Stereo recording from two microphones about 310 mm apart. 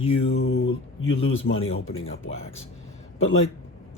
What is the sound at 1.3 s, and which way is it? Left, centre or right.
A man's voice, left.